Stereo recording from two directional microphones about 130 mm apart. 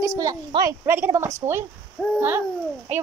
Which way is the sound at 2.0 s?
5° left (ahead or behind).